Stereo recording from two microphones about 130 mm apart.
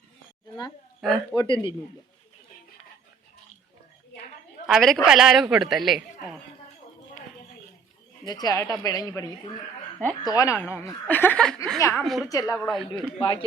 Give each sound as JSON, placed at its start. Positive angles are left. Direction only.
{"t": 1.0, "sound": "a woman's voice", "side_deg": 5}
{"t": 1.4, "sound": "speech", "side_deg": 40}
{"t": 4.6, "sound": "a woman's voice", "side_deg": 0}
{"t": 8.3, "sound": "a woman's voice", "side_deg": 30}
{"t": 12.0, "sound": "a woman's voice", "side_deg": 0}
{"t": 12.3, "sound": "a woman's voice", "side_deg": 25}
{"t": 12.5, "sound": "a woman's voice", "side_deg": 0}
{"t": 13.1, "sound": "speech", "side_deg": 40}